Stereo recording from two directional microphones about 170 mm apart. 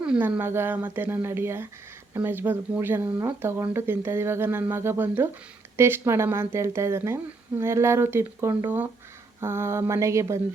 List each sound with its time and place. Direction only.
0.0 s speech: 10° right (ahead or behind)